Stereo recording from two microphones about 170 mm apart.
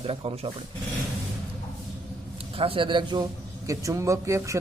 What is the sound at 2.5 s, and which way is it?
A man's voice, 30° right (ahead or behind).